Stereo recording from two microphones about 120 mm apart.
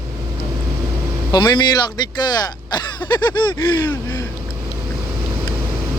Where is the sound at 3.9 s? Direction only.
25° left (ahead or behind).